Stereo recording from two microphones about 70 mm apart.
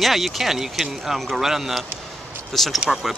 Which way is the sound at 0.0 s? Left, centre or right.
Centre.